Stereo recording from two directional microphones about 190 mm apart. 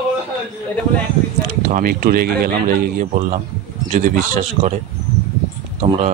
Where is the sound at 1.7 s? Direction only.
50° right (ahead or behind).